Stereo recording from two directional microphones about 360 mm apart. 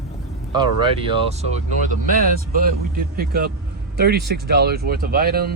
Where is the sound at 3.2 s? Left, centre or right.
Right.